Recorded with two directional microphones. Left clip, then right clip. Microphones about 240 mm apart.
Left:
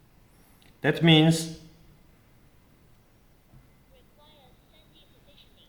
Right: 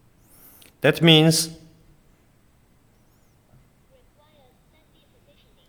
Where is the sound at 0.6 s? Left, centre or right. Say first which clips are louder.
Right 6 dB; right.